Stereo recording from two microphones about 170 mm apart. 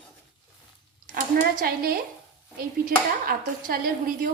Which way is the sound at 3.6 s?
60° right (ahead or behind).